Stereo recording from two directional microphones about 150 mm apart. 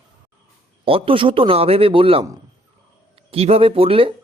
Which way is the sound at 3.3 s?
40° right (ahead or behind).